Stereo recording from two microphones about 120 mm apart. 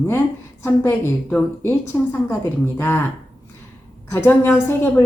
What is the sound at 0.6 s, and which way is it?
A woman's voice, 15° left (ahead or behind).